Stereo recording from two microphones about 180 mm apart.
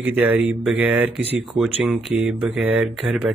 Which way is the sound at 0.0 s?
10° right (ahead or behind).